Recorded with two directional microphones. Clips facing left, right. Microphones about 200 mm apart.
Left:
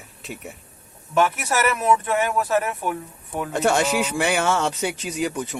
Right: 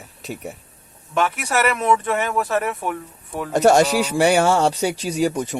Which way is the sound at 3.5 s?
40° right (ahead or behind).